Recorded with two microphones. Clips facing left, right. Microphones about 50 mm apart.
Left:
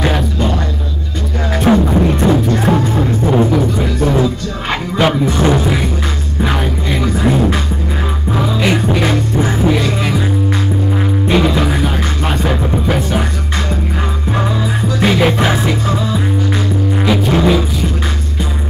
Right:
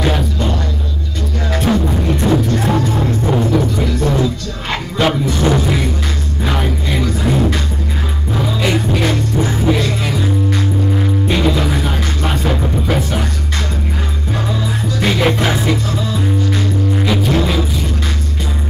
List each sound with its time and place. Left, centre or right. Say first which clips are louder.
0.0 s music: left 2 dB; centre
7.0 s music: left 3 dB; centre
11.2 s music: left 4 dB; centre
15.0 s music: left 2 dB; centre